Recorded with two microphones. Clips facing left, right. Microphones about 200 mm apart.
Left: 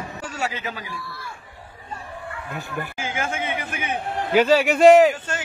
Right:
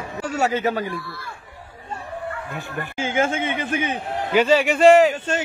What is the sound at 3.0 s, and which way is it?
A man's voice, 25° right (ahead or behind).